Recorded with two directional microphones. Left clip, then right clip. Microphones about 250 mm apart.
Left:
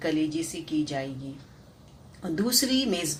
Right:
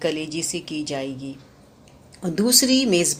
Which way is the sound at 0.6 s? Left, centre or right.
Right.